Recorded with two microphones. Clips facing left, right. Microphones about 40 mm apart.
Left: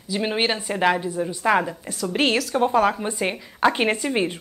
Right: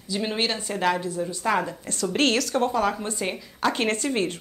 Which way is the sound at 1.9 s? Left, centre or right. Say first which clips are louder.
Left 1 dB; centre.